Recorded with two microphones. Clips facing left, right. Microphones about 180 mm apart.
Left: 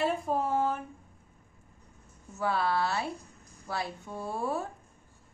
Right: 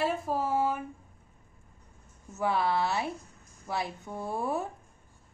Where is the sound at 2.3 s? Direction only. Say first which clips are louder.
Right 1 dB; 20° right (ahead or behind).